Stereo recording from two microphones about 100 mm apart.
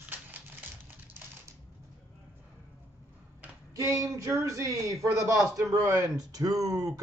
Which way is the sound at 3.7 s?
35° right (ahead or behind).